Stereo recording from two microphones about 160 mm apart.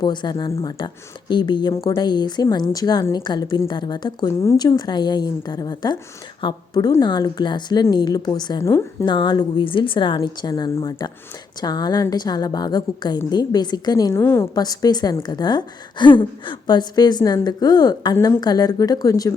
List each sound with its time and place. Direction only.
0.0 s a woman's voice: 30° left (ahead or behind)
9.0 s a woman's voice: 30° left (ahead or behind)